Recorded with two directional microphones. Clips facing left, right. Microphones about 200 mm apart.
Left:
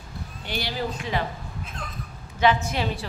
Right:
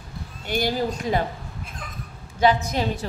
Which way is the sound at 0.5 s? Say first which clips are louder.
Right 6 dB; 45° right (ahead or behind).